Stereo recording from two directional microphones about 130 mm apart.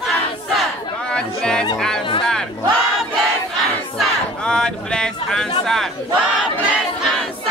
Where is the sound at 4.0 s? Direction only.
5° left (ahead or behind).